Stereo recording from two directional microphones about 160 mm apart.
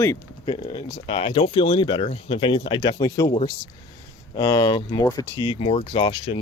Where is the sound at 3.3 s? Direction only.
35° left (ahead or behind).